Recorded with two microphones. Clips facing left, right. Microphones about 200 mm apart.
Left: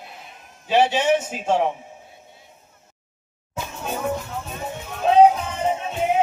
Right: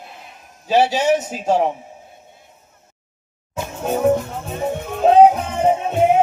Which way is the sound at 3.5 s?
45° right (ahead or behind).